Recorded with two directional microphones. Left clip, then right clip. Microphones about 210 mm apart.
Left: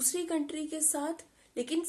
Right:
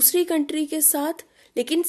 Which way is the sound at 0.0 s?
40° right (ahead or behind).